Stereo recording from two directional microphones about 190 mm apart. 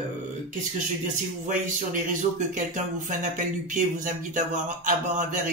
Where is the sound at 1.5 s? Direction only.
45° right (ahead or behind).